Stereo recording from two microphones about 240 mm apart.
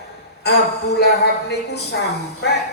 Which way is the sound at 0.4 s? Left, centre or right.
Left.